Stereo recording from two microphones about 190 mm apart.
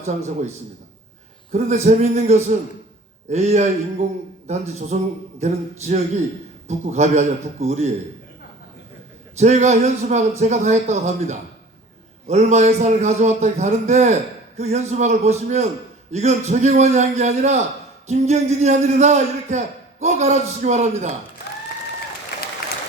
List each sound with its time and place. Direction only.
1.5 s a man's voice: 35° right (ahead or behind)
9.4 s a man's voice: 35° right (ahead or behind)